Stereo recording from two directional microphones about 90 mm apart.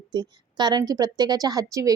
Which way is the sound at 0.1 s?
55° right (ahead or behind).